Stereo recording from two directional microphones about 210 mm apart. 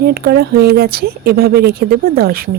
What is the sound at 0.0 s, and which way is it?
Speech, 50° right (ahead or behind).